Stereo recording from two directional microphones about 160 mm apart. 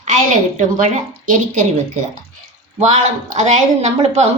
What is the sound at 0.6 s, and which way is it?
A woman's voice, 50° right (ahead or behind).